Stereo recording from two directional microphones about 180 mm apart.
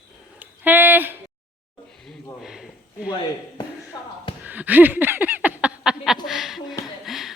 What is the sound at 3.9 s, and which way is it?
Speech, 20° left (ahead or behind).